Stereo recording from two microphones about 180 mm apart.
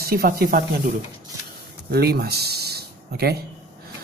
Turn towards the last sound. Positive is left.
turn(degrees=-60)  # may be behind; listen again after turning